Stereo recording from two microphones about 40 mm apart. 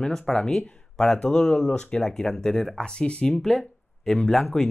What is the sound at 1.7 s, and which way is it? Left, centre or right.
Speech, left.